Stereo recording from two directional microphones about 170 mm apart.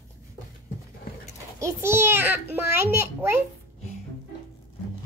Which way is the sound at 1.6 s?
15° right (ahead or behind).